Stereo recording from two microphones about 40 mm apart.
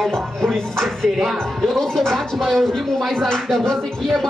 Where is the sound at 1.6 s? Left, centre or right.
Centre.